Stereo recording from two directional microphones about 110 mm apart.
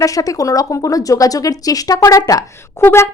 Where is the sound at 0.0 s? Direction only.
30° left (ahead or behind).